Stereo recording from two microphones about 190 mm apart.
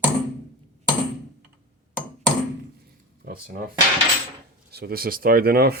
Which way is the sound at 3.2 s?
55° right (ahead or behind).